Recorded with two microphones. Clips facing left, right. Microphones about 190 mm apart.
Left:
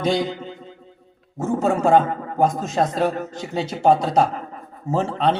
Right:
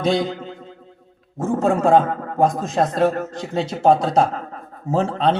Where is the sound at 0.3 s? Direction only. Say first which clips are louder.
Right 1 dB; centre (ahead or behind).